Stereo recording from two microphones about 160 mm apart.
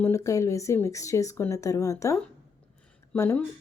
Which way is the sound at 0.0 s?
20° left (ahead or behind).